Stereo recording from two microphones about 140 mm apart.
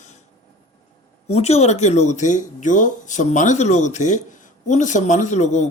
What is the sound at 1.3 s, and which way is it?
A man's voice, 50° left (ahead or behind).